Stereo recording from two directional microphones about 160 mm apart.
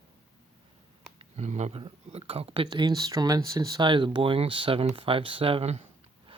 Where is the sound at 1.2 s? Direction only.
45° right (ahead or behind).